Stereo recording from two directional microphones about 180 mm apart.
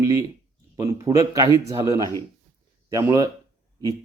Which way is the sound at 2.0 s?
15° left (ahead or behind).